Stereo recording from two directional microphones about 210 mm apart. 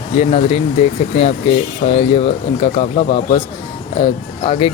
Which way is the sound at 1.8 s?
35° left (ahead or behind).